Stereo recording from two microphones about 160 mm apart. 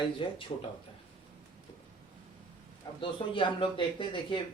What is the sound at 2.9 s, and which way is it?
A man's voice, 30° left (ahead or behind).